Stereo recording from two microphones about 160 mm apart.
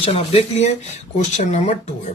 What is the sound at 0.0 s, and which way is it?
Speech, 40° left (ahead or behind).